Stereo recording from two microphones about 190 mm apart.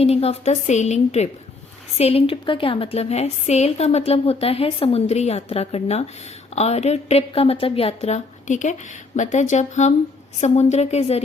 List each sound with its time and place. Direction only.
0.0 s a woman's voice: 30° left (ahead or behind)